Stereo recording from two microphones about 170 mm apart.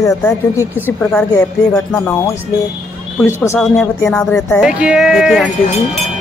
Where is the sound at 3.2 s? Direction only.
15° left (ahead or behind).